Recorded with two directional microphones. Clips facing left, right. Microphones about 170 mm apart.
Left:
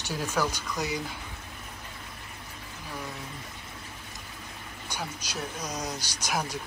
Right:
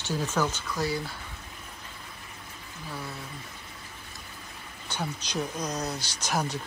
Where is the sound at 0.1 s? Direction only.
10° left (ahead or behind).